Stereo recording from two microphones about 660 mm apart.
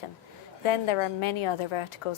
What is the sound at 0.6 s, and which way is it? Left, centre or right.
A woman's voice, left.